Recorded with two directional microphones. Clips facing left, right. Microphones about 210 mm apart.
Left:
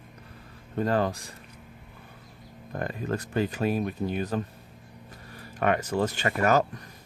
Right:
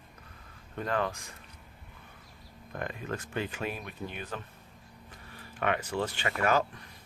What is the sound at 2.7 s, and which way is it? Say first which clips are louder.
Speech: left 6 dB; 40° left (ahead or behind).